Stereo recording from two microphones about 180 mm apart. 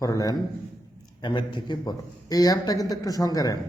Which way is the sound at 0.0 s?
20° left (ahead or behind).